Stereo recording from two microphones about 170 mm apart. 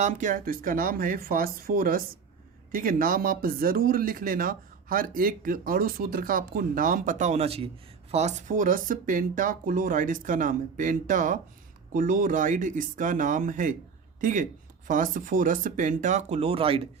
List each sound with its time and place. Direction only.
0.0 s speech: 50° right (ahead or behind); by 16.8 s 35° right (ahead or behind)